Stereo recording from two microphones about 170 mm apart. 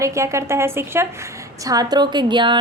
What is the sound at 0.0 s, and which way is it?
A woman's voice, 15° right (ahead or behind).